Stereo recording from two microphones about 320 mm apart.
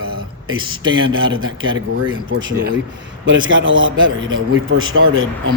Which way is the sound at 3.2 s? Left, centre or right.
Right.